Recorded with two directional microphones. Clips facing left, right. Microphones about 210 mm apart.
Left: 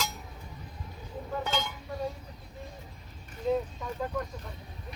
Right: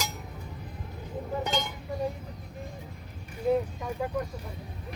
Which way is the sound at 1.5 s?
15° right (ahead or behind).